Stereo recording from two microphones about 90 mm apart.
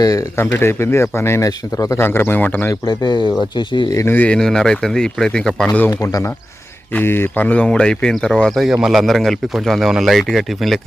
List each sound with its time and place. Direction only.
0.0 s speech: 40° left (ahead or behind)
0.3 s speech: 30° left (ahead or behind)
2.8 s speech: 55° left (ahead or behind)
3.9 s speech: 25° left (ahead or behind)
4.3 s speech: 5° left (ahead or behind)
5.9 s speech: 40° left (ahead or behind)
6.9 s speech: 25° left (ahead or behind); by 10.8 s centre (ahead or behind)